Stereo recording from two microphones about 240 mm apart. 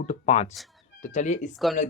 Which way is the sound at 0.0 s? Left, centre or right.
Left.